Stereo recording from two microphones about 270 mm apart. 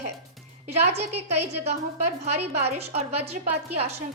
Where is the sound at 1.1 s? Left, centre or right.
Right.